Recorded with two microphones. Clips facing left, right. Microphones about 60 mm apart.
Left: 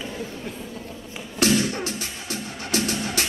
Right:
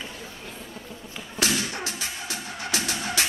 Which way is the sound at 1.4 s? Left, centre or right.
Left.